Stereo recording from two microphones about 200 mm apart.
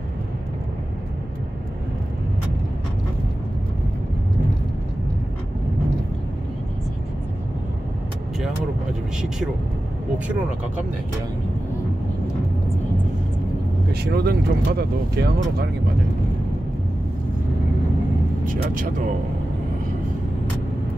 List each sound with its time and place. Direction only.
14.1 s speech: 50° right (ahead or behind)
18.4 s speech: 40° right (ahead or behind)